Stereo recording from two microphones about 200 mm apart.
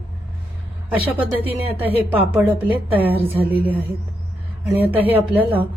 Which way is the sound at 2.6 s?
10° right (ahead or behind).